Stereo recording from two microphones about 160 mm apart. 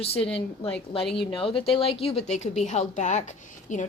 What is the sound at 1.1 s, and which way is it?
Speech, 35° left (ahead or behind).